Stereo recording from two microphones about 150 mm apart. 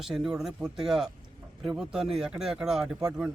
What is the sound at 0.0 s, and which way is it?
Speech, centre (ahead or behind).